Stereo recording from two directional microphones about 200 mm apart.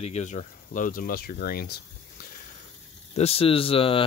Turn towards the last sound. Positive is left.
turn(degrees=25)  # may be behind; listen again after turning